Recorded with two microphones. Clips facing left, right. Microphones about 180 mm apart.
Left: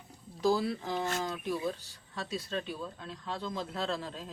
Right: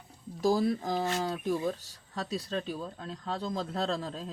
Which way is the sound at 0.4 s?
45° right (ahead or behind).